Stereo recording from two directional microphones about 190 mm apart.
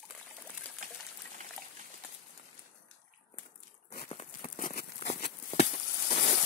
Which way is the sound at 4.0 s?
35° left (ahead or behind).